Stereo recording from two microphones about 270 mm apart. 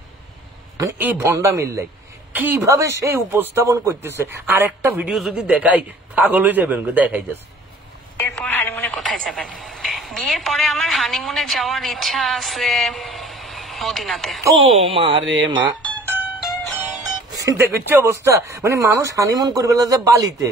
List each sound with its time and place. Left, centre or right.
0.7 s a man's voice: centre
8.2 s speech: centre
14.6 s speech: right
15.4 s music: centre
17.5 s speech: centre